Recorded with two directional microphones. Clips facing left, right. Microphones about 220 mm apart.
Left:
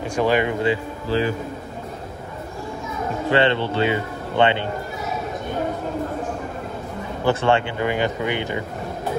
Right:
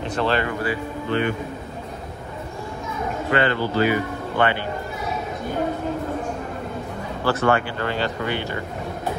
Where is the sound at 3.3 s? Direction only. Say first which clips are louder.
Left 2 dB; 25° left (ahead or behind).